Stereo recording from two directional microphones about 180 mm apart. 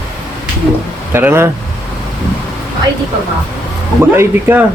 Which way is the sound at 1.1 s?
15° right (ahead or behind).